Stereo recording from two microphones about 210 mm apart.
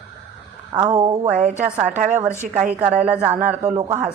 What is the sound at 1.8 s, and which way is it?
Speech, 40° right (ahead or behind).